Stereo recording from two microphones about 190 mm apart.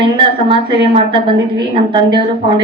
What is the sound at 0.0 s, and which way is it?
A woman's voice, 25° right (ahead or behind).